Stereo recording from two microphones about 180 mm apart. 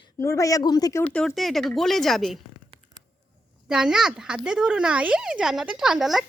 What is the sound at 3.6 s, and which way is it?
Speech, 5° right (ahead or behind).